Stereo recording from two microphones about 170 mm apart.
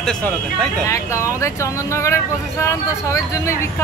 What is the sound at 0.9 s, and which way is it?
Speech, 15° left (ahead or behind).